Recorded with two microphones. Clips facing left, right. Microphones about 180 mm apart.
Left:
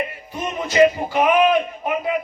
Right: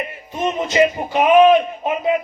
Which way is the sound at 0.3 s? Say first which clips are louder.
Even; 20° right (ahead or behind).